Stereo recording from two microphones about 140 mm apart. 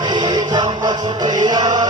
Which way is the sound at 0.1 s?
30° right (ahead or behind).